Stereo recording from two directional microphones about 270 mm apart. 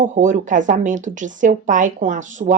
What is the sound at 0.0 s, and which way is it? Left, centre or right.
A woman's voice, right.